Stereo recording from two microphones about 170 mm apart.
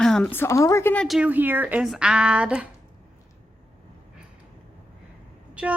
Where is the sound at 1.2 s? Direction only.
10° right (ahead or behind).